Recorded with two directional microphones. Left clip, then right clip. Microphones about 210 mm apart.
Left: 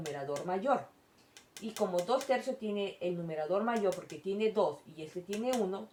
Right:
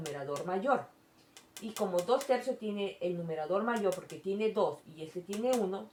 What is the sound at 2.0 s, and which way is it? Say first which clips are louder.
Speech: right 1 dB; 20° right (ahead or behind).